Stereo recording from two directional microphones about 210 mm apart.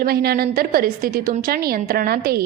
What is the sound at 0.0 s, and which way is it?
A woman's voice, 45° right (ahead or behind).